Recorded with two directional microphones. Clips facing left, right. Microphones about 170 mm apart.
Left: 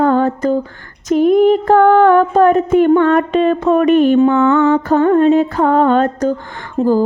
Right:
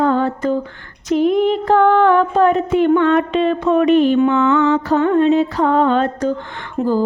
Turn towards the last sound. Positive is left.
turn(degrees=35)  # may be behind; listen again after turning